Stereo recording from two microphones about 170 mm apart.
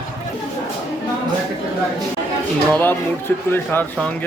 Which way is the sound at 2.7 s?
10° left (ahead or behind).